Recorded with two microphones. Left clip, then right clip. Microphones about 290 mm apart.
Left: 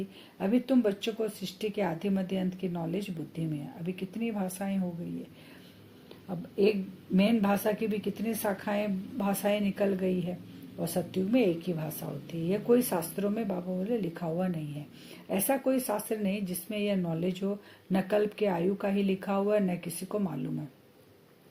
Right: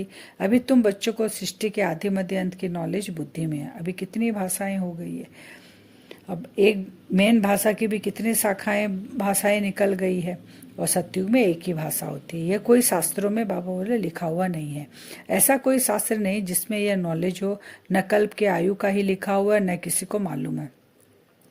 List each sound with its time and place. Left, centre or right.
0.3 s a woman's voice: right
6.2 s a woman's voice: right